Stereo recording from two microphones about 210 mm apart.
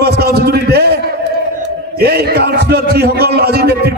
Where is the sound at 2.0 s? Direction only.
50° right (ahead or behind).